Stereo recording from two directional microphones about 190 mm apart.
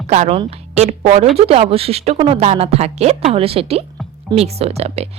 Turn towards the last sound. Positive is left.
turn(degrees=-35)  # may be behind; listen again after turning